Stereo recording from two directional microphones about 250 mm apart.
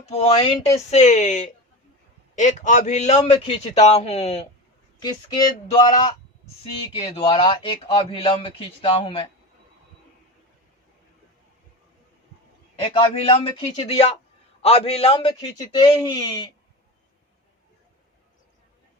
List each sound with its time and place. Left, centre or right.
0.0 s a man's voice: left
12.8 s a man's voice: centre